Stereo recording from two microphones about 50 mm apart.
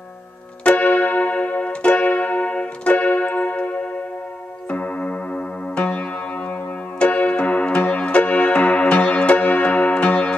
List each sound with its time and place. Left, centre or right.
0.7 s music: left